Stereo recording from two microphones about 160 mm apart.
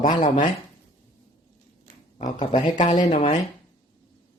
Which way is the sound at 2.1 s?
55° left (ahead or behind).